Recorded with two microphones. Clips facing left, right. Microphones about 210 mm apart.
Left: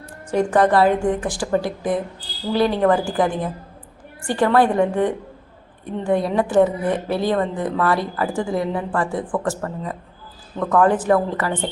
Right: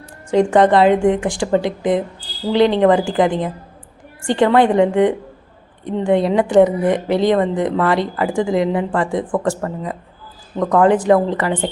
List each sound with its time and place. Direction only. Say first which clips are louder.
0.3 s speech: right 4 dB; 20° right (ahead or behind)